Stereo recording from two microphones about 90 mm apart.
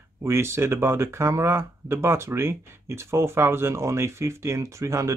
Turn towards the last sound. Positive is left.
turn(degrees=-35)  # may be behind; listen again after turning